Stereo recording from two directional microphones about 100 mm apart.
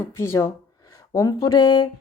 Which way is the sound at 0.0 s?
25° left (ahead or behind).